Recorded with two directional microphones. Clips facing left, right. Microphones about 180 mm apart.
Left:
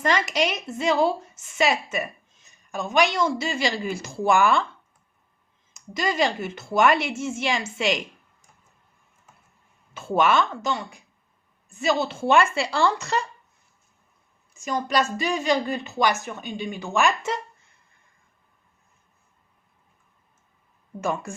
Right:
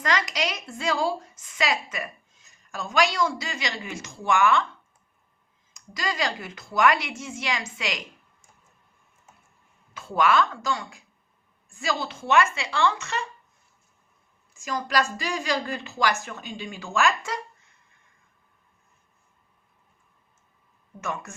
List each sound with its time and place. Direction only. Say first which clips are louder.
0.0 s a woman's voice: left 4 dB; 25° left (ahead or behind)
5.7 s a woman's voice: left 5 dB; 25° left (ahead or behind)
10.2 s a woman's voice: left 1 dB; 25° left (ahead or behind)
14.5 s a woman's voice: left 2 dB; 20° left (ahead or behind)
21.0 s a woman's voice: left 6 dB; 30° left (ahead or behind)